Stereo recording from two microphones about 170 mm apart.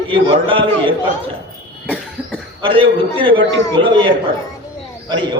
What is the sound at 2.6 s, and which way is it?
A man's voice, 30° right (ahead or behind).